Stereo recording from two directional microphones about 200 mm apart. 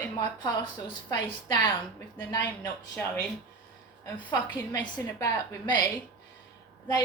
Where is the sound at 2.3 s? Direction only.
15° left (ahead or behind).